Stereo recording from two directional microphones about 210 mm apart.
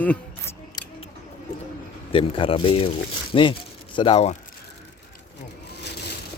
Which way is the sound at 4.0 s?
25° left (ahead or behind).